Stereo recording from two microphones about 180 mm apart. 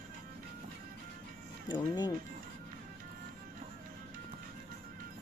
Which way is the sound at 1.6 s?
25° left (ahead or behind).